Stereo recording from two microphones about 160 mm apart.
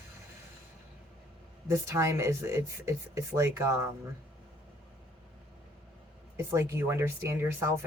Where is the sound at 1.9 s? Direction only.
20° right (ahead or behind).